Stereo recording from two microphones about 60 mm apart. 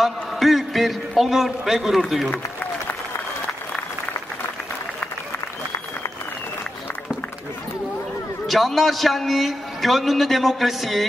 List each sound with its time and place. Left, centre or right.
0.0 s a man's voice: centre
2.3 s applause: left
8.5 s a man's voice: centre